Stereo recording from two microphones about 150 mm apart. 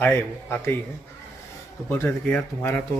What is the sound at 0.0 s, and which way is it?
Speech, 15° left (ahead or behind).